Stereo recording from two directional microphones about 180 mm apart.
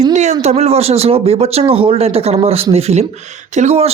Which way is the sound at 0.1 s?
40° right (ahead or behind).